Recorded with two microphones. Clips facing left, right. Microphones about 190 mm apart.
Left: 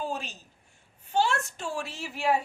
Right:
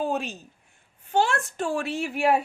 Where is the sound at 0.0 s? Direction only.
60° right (ahead or behind).